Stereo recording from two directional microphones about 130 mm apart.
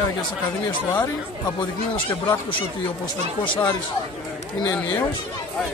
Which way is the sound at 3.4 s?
40° left (ahead or behind).